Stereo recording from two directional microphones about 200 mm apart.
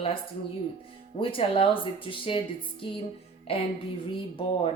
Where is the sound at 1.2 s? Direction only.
25° left (ahead or behind).